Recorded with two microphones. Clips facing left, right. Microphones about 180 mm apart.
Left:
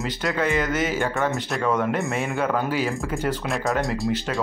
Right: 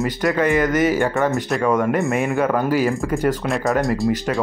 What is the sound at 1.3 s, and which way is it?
Speech, centre (ahead or behind).